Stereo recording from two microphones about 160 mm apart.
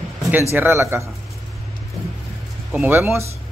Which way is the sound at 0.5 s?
15° right (ahead or behind).